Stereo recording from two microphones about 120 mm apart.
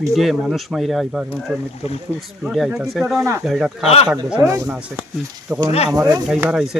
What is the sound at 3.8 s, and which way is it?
Speech, 55° left (ahead or behind).